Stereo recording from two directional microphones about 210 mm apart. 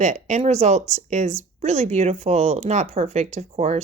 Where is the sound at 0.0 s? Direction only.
35° right (ahead or behind).